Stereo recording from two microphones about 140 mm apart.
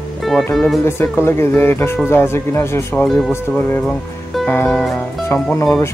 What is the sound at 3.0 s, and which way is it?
Speech, centre (ahead or behind).